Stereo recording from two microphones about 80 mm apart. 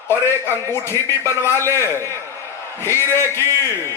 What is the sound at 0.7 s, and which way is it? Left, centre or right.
A man's voice, left.